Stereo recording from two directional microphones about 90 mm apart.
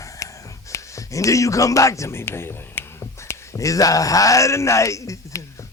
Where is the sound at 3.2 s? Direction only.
40° left (ahead or behind).